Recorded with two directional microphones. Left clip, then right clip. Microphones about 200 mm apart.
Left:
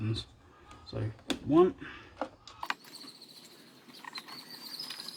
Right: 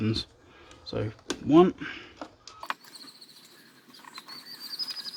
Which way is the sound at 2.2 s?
5° left (ahead or behind).